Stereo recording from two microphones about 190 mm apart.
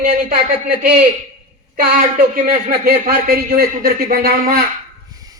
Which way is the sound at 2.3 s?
50° right (ahead or behind).